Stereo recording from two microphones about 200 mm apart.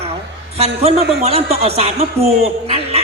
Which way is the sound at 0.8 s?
30° right (ahead or behind).